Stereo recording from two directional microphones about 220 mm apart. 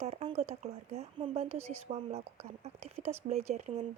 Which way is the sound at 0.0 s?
30° right (ahead or behind).